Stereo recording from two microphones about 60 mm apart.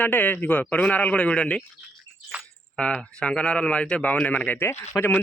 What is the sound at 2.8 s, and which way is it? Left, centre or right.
A man's voice, left.